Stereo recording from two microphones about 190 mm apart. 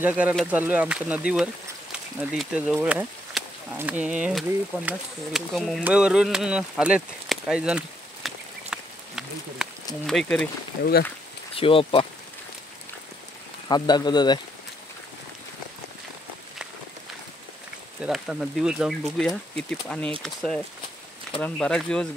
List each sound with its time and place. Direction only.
0.0 s speech: 5° right (ahead or behind)
5.9 s a sound: 5° right (ahead or behind)
10.0 s speech: 5° left (ahead or behind)
10.8 s speech: 55° left (ahead or behind)
11.5 s speech: 30° left (ahead or behind)
13.7 s speech: 20° left (ahead or behind)
18.0 s speech: centre (ahead or behind)